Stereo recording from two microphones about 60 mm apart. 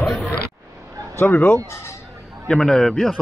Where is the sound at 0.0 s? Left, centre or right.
Centre.